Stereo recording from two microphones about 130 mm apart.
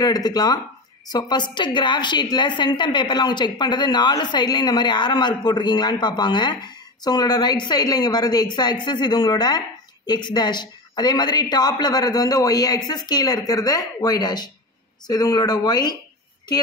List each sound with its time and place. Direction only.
0.0 s a woman's voice: 30° left (ahead or behind)